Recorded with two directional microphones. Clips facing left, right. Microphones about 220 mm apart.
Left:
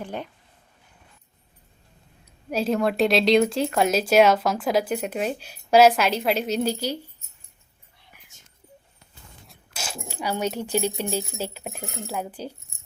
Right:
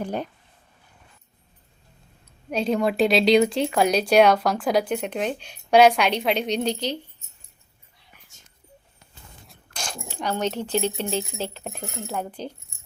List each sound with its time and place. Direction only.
0.0 s speech: 40° right (ahead or behind)
2.5 s speech: 5° left (ahead or behind)
9.5 s speech: 5° left (ahead or behind)